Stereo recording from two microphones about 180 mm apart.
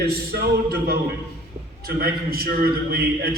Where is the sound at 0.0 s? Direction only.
60° right (ahead or behind).